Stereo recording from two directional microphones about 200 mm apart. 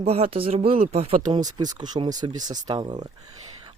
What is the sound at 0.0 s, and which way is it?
Speech, 30° right (ahead or behind).